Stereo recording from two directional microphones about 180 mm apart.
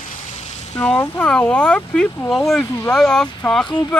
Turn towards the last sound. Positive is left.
turn(degrees=5)  # may be behind; listen again after turning